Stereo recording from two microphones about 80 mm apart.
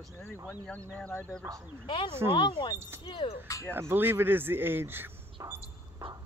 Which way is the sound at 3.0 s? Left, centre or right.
Left.